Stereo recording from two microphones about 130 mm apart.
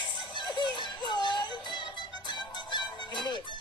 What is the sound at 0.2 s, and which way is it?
Music, 35° left (ahead or behind).